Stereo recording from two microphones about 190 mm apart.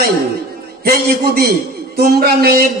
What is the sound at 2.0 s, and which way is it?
Speech, 55° right (ahead or behind).